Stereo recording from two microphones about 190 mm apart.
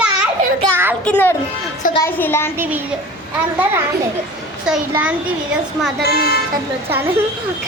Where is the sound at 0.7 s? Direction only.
10° right (ahead or behind).